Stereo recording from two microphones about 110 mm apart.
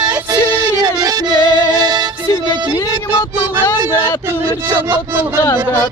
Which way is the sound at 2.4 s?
40° right (ahead or behind).